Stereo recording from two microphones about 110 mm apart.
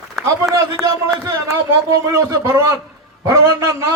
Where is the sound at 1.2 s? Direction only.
30° right (ahead or behind).